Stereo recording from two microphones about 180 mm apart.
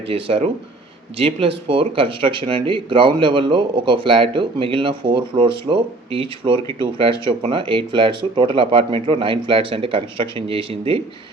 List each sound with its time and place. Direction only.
0.1 s speech: 30° right (ahead or behind)